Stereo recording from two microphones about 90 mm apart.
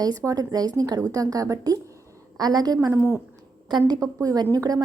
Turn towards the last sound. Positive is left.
turn(degrees=-40)  # may be behind; listen again after turning